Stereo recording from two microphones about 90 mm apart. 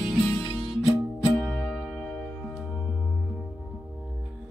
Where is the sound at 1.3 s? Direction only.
10° left (ahead or behind).